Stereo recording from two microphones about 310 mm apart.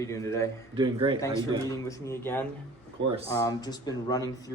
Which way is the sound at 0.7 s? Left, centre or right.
Centre.